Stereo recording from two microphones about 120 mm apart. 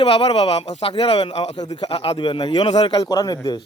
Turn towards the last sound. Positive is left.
turn(degrees=35)  # may be behind; listen again after turning